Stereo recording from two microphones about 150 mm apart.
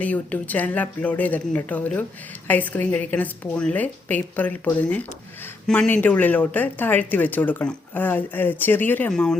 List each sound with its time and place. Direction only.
0.0 s speech: 10° left (ahead or behind)